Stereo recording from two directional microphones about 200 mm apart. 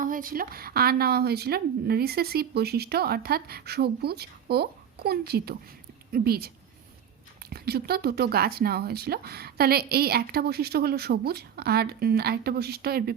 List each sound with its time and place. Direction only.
0.0 s speech: 45° right (ahead or behind)
7.5 s speech: 50° right (ahead or behind)